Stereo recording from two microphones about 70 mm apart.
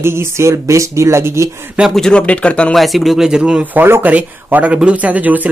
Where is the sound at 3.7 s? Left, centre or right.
Right.